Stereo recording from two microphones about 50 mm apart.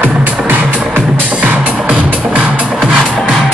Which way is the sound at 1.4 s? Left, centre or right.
Right.